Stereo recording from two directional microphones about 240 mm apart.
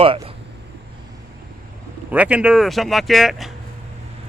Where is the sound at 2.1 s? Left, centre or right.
Centre.